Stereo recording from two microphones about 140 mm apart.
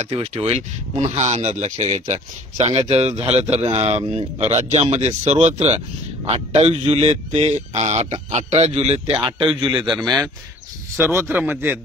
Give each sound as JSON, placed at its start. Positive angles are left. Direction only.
{"t": 0.0, "sound": "speech", "side_deg": -50}
{"t": 9.6, "sound": "a man's voice", "side_deg": -35}
{"t": 9.9, "sound": "speech", "side_deg": 0}
{"t": 11.0, "sound": "a man's voice", "side_deg": -15}